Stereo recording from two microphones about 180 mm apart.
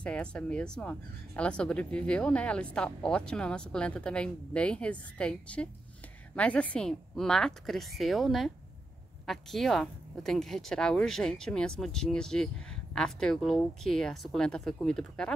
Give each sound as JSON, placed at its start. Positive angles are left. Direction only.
{"t": 0.0, "sound": "speech", "side_deg": 5}